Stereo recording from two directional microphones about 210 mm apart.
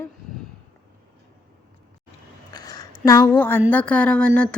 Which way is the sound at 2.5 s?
20° left (ahead or behind).